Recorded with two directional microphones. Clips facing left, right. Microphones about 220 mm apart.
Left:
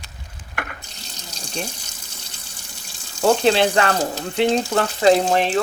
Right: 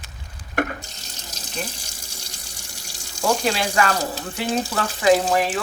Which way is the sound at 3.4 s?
30° left (ahead or behind).